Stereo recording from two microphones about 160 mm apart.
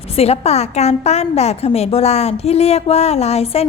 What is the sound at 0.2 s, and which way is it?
A woman's voice, 40° left (ahead or behind).